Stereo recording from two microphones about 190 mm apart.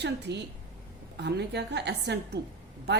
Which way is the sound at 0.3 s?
60° right (ahead or behind).